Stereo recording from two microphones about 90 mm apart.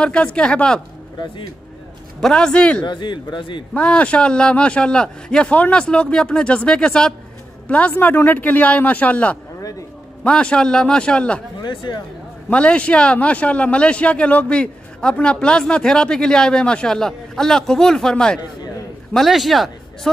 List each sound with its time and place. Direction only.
0.0 s a man's voice: 10° left (ahead or behind)
2.1 s a man's voice: 5° left (ahead or behind)
2.8 s a man's voice: 55° left (ahead or behind)
3.7 s a man's voice: 15° left (ahead or behind)
9.6 s a sound: 40° left (ahead or behind)
10.2 s a man's voice: 10° left (ahead or behind)
11.6 s a man's voice: 60° left (ahead or behind)
12.4 s a man's voice: 15° left (ahead or behind)